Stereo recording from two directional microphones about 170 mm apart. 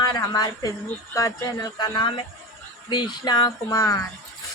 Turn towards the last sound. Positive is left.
turn(degrees=20)  # may be behind; listen again after turning